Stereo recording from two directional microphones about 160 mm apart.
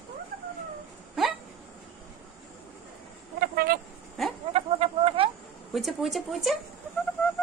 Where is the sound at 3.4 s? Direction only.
70° right (ahead or behind).